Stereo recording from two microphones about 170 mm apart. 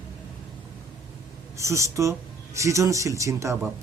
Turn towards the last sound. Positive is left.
turn(degrees=-20)  # may be behind; listen again after turning